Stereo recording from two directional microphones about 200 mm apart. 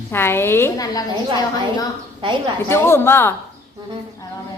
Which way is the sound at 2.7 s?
10° left (ahead or behind).